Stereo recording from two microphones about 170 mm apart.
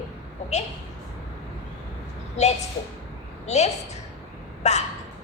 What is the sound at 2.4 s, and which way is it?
A woman's voice, 40° left (ahead or behind).